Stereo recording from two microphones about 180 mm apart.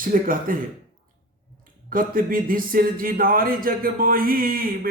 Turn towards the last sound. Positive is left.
turn(degrees=-55)  # may be behind; listen again after turning